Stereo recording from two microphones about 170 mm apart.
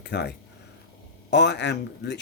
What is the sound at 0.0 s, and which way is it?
Speech, 80° left.